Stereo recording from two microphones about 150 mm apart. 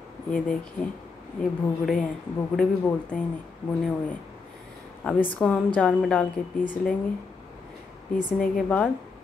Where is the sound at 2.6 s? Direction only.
10° left (ahead or behind).